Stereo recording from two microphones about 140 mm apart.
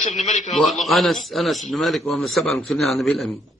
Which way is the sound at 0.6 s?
Centre (ahead or behind).